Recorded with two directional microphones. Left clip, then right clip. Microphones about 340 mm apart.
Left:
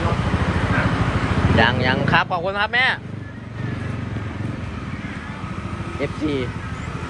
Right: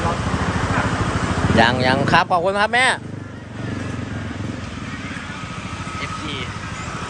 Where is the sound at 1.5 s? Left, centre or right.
Centre.